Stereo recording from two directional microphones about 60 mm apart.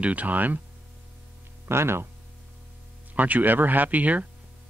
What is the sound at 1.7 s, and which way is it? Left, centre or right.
Speech, right.